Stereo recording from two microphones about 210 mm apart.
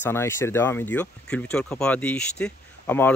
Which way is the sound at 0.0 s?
10° left (ahead or behind).